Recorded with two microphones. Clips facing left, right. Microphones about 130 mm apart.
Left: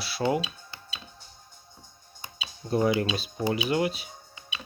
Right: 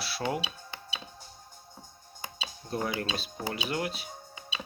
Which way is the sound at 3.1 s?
Centre (ahead or behind).